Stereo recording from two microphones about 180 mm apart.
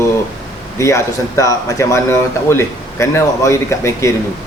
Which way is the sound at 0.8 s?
15° left (ahead or behind).